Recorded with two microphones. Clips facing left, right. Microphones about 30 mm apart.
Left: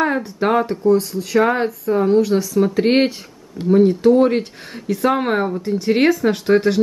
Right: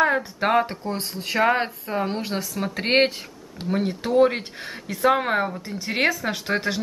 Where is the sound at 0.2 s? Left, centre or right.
Centre.